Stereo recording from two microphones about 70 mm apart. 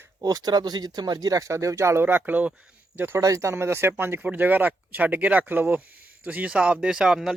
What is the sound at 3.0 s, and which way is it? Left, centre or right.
Speech, right.